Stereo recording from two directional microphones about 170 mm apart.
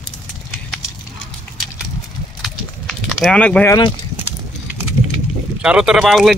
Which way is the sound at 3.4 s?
10° left (ahead or behind).